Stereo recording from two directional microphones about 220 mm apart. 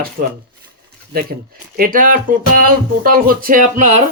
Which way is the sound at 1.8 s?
40° right (ahead or behind).